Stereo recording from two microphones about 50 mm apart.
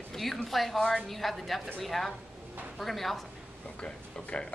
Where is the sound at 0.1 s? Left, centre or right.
Centre.